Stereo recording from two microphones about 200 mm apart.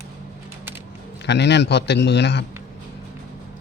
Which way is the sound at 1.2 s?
60° left (ahead or behind).